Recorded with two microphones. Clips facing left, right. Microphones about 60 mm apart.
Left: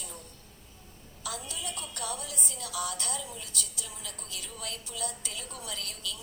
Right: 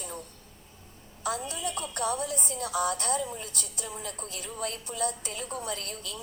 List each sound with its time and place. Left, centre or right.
1.2 s a woman's voice: right